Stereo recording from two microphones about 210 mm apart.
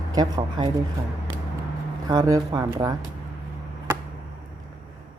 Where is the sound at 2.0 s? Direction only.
15° right (ahead or behind).